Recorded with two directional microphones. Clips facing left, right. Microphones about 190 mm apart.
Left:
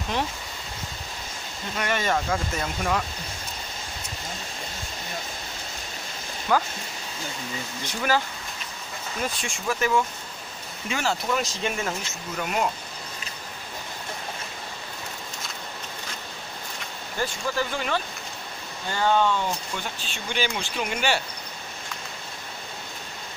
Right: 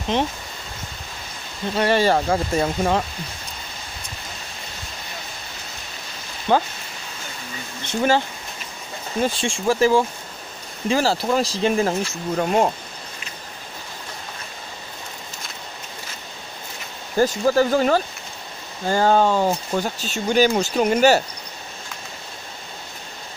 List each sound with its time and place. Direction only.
0.1 s speech: 20° right (ahead or behind)
1.8 s speech: 30° right (ahead or behind)
6.5 s speech: 30° right (ahead or behind)
7.8 s speech: 25° right (ahead or behind)
9.2 s speech: 30° right (ahead or behind)
17.2 s speech: 40° right (ahead or behind)